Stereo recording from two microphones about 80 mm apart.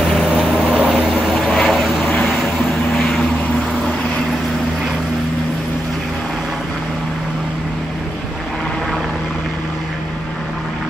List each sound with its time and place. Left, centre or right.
0.3 s vehicle: centre
1.5 s vehicle: centre
2.0 s vehicle: centre